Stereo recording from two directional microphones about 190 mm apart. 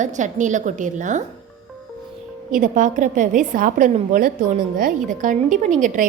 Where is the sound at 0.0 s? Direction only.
40° right (ahead or behind).